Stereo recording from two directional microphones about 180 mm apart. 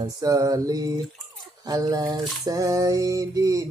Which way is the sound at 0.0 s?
20° right (ahead or behind).